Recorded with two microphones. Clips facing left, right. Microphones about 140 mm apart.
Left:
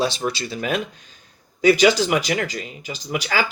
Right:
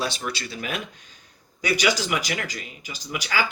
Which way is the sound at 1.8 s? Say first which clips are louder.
Left 7 dB; 25° left (ahead or behind).